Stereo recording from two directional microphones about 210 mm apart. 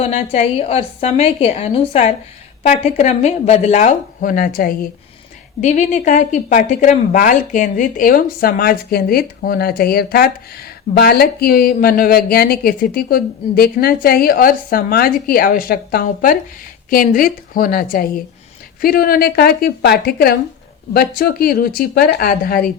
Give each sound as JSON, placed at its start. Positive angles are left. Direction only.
{"t": 0.0, "sound": "a woman's voice", "side_deg": 30}